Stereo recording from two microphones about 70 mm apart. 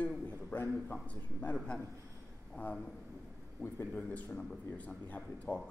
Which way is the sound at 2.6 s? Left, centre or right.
Left.